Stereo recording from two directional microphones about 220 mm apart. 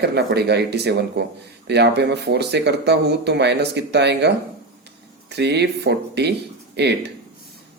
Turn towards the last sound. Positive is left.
turn(degrees=-50)  # may be behind; listen again after turning